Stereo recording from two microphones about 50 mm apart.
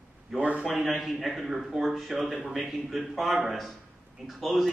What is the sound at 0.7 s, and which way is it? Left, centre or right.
A man's voice, centre.